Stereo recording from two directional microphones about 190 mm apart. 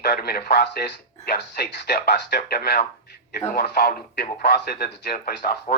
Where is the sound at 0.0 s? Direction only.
55° left (ahead or behind).